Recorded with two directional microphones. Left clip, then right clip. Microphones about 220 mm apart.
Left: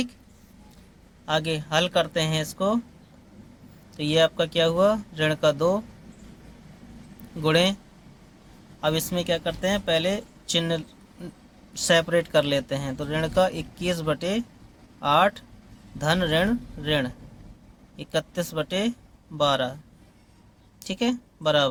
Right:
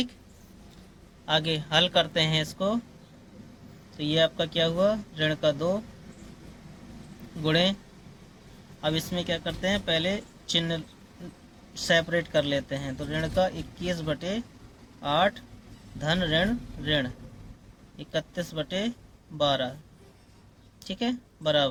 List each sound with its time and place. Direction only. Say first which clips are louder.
1.2 s speech: left 1 dB; 20° left (ahead or behind)
3.9 s a man's voice: left 4 dB; 30° left (ahead or behind)
7.4 s a man's voice: left 3 dB; 30° left (ahead or behind)
8.8 s a man's voice: left 4 dB; 30° left (ahead or behind)
20.8 s speech: left 4 dB; 30° left (ahead or behind)